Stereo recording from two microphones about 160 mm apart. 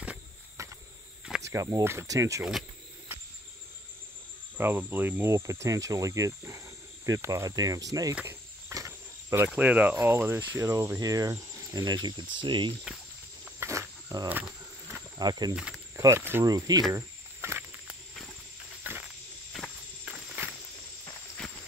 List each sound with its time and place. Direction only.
0.6 s a sound: 20° right (ahead or behind)
1.4 s speech: 20° right (ahead or behind)
4.6 s speech: 10° right (ahead or behind)
8.1 s cricket: 10° right (ahead or behind)
9.5 s speech: 10° right (ahead or behind); by 12.7 s 30° right (ahead or behind)
13.6 s wild animals: 20° right (ahead or behind)
14.3 s a sound: 10° right (ahead or behind)
15.1 s speech: 25° right (ahead or behind)
15.5 s speech: 5° right (ahead or behind)
16.0 s speech: 15° right (ahead or behind)
16.9 s a sound: 15° right (ahead or behind)
19.5 s walk: centre (ahead or behind)